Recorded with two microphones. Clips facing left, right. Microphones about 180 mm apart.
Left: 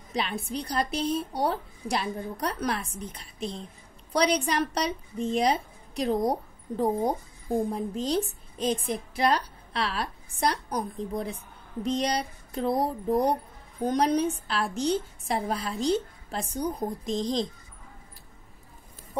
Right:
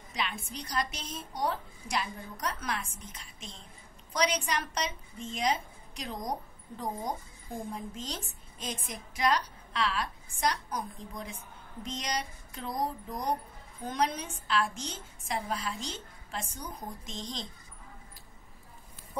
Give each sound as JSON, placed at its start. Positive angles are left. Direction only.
{"t": 0.1, "sound": "a woman's voice", "side_deg": 35}
{"t": 13.8, "sound": "speech", "side_deg": 35}